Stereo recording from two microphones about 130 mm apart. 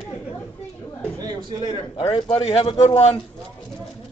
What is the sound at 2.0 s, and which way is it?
A man's voice, 35° left (ahead or behind).